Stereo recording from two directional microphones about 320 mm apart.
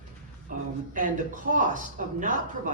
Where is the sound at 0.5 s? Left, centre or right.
Right.